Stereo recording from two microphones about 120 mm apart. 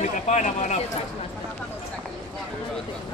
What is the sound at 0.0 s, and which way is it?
Speech, 90° left.